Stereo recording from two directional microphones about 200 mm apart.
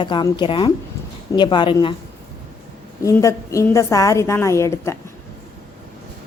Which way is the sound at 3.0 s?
15° left (ahead or behind).